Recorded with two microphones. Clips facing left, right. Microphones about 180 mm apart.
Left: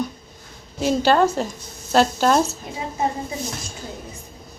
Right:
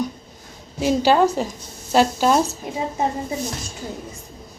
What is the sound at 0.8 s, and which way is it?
Speech, 10° right (ahead or behind).